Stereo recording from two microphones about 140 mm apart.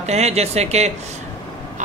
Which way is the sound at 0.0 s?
50° right (ahead or behind).